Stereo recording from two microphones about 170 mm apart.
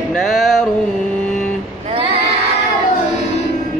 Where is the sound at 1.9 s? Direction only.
35° right (ahead or behind).